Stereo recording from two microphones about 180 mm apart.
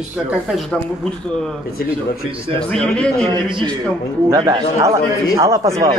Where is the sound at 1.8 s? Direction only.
55° left (ahead or behind).